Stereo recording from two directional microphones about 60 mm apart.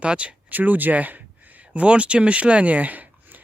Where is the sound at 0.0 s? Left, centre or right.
Centre.